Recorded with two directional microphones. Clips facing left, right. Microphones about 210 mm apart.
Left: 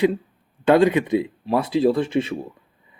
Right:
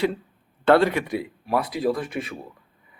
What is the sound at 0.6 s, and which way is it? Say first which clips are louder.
A man's voice: left 2 dB; 15° left (ahead or behind).